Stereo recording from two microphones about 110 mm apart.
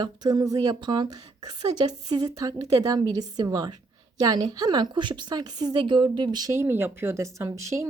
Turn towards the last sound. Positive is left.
turn(degrees=-25)  # may be behind; listen again after turning